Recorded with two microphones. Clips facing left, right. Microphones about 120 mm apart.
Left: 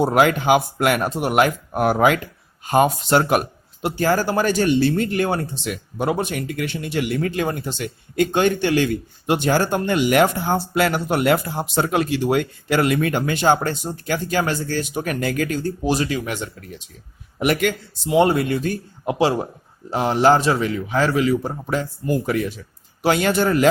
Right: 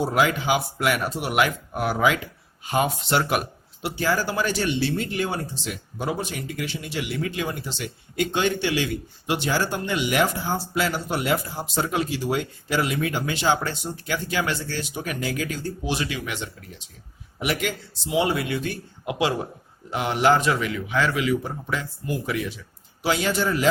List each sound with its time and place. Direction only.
0.0 s speech: 55° left (ahead or behind)
17.4 s speech: 55° left (ahead or behind)
23.0 s speech: 55° left (ahead or behind)